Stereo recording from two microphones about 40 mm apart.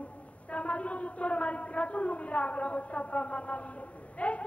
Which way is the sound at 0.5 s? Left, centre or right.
Left.